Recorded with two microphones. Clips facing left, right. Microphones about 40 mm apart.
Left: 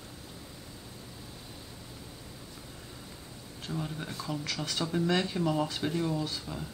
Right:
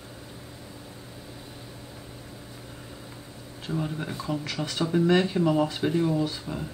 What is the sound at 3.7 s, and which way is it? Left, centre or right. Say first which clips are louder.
Speech: right 6 dB; centre.